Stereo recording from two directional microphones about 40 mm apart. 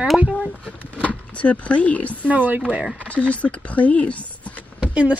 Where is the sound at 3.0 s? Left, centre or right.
Left.